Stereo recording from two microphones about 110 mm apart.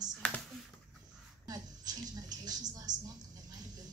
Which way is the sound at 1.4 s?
35° right (ahead or behind).